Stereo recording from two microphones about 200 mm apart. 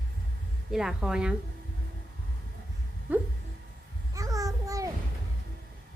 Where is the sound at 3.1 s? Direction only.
10° right (ahead or behind).